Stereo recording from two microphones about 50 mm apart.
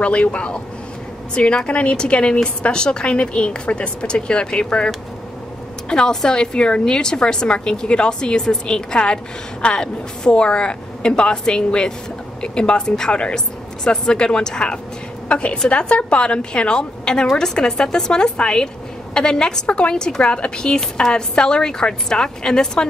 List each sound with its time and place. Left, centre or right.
0.0 s a woman's voice: left